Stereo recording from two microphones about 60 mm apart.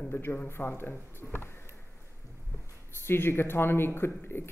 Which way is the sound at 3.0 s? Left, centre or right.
Left.